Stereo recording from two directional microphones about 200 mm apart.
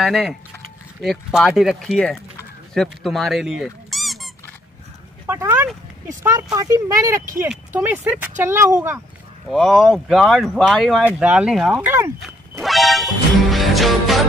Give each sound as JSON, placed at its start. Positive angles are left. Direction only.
{"t": 0.0, "sound": "speech", "side_deg": 0}
{"t": 5.2, "sound": "speech", "side_deg": -10}
{"t": 9.5, "sound": "speech", "side_deg": 0}
{"t": 12.6, "sound": "music", "side_deg": 0}